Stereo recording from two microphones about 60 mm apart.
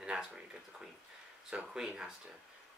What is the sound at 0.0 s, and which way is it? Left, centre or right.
Speech, centre.